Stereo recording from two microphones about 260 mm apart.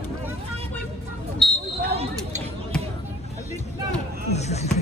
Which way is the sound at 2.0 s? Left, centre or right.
Right.